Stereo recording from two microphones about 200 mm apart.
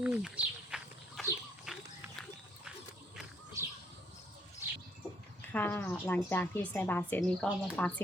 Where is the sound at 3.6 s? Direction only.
15° right (ahead or behind).